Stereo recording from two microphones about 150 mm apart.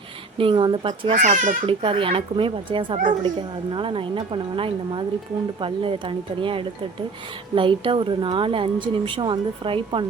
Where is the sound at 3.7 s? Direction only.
35° right (ahead or behind).